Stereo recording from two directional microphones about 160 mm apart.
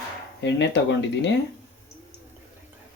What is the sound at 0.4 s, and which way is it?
Speech, 90° left.